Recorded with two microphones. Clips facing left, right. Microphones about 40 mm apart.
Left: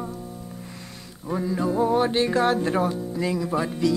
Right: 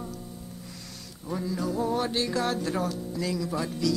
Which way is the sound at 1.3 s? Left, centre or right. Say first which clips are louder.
Left 6 dB; left.